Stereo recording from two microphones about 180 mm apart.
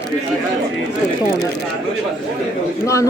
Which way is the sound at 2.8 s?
15° left (ahead or behind).